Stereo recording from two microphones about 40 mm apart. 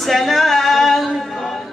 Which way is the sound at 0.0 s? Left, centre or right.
Centre.